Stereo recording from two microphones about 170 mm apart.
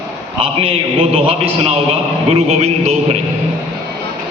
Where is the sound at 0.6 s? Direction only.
35° right (ahead or behind).